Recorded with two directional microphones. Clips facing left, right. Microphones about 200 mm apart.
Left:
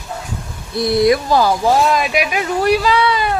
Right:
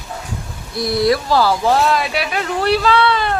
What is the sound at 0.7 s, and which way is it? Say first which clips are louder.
Speech: left 3 dB; 20° left (ahead or behind).